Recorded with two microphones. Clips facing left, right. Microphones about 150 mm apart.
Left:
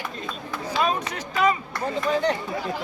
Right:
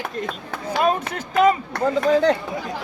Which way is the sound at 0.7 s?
55° right (ahead or behind).